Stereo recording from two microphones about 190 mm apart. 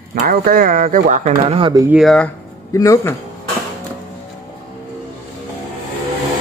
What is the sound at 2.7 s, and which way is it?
Speech, 15° left (ahead or behind).